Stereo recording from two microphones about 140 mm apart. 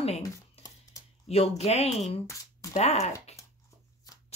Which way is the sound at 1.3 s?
45° left (ahead or behind).